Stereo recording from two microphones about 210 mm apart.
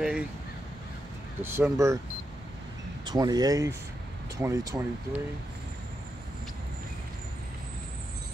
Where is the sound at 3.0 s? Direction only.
20° right (ahead or behind).